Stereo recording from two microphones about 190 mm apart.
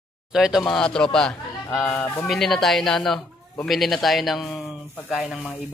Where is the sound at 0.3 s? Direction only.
5° right (ahead or behind).